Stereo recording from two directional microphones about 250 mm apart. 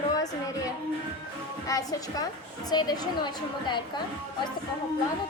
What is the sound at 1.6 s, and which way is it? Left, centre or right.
A woman's voice, centre.